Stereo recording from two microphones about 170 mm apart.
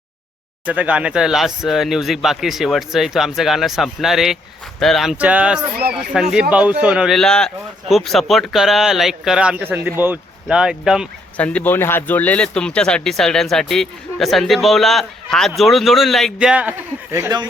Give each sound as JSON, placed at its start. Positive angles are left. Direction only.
{"t": 0.6, "sound": "speech", "side_deg": -10}
{"t": 11.3, "sound": "speech", "side_deg": 10}